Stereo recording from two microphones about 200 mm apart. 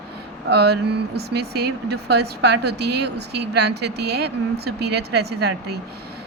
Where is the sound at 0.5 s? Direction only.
55° right (ahead or behind).